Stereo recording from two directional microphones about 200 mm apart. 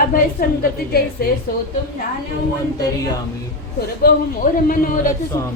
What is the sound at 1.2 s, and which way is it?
Speech, 50° left (ahead or behind).